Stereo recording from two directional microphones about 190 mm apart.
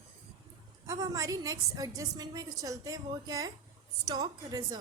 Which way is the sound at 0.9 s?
15° right (ahead or behind).